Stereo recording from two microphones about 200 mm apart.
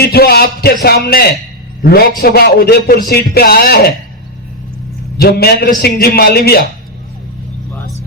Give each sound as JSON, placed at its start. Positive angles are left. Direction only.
{"t": 0.0, "sound": "a man's voice", "side_deg": 50}
{"t": 5.1, "sound": "a man's voice", "side_deg": 50}